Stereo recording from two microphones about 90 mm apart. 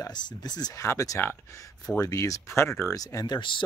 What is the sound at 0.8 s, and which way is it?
Speech, 35° left (ahead or behind).